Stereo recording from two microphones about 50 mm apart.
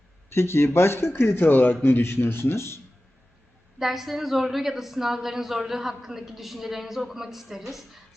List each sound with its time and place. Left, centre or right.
0.3 s speech: left
1.5 s a man's voice: left
1.8 s speech: left
3.8 s a woman's voice: centre